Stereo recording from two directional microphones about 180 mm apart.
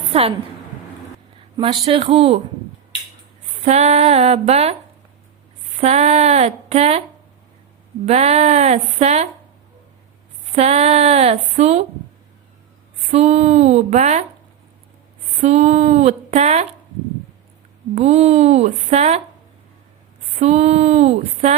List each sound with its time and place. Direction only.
0.1 s a woman's voice: 35° right (ahead or behind)
1.5 s a woman's voice: 30° right (ahead or behind)
3.7 s a woman's voice: 40° right (ahead or behind)
5.8 s a woman's voice: 35° right (ahead or behind)
8.0 s a woman's voice: 35° right (ahead or behind)
10.5 s a woman's voice: 35° right (ahead or behind)
13.0 s a woman's voice: 35° right (ahead or behind)
15.4 s a woman's voice: 40° right (ahead or behind)
17.9 s a woman's voice: 35° right (ahead or behind)
20.4 s a woman's voice: 35° right (ahead or behind)